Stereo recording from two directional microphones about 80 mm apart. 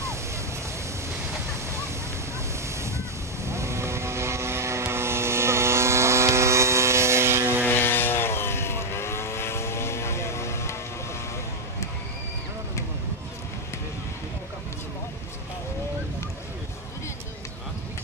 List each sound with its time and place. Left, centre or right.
3.4 s vehicle: right
7.6 s vehicle: left